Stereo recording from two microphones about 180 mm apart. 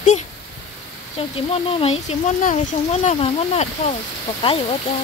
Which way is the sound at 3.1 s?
35° left (ahead or behind).